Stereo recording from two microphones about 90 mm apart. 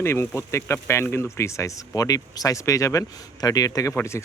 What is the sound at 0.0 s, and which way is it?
Speech, 30° left (ahead or behind).